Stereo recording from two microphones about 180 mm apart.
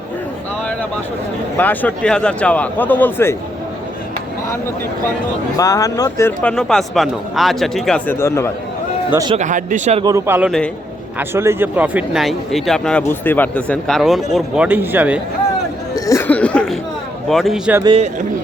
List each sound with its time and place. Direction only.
1.5 s a man's voice: 10° left (ahead or behind)
5.5 s a man's voice: 20° left (ahead or behind)
9.0 s a man's voice: 20° right (ahead or behind)
9.3 s speech: 45° right (ahead or behind)
10.0 s a man's voice: 15° right (ahead or behind)
16.0 s a sound: 15° left (ahead or behind)
17.2 s speech: centre (ahead or behind)
17.8 s a man's voice: 30° right (ahead or behind)